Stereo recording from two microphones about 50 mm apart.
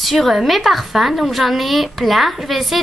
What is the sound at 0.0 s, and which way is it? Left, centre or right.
A woman's voice, centre.